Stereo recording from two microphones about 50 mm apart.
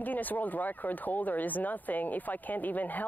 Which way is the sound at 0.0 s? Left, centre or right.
Left.